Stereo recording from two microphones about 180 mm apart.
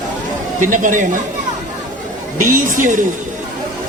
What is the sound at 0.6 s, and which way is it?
Speech, 45° right (ahead or behind).